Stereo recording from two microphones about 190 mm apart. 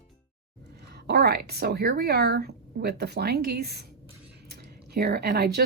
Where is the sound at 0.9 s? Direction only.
60° right (ahead or behind).